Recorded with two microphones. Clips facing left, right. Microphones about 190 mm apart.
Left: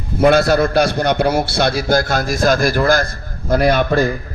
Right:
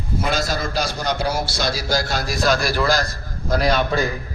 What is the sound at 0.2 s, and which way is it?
A man's voice, 60° left (ahead or behind).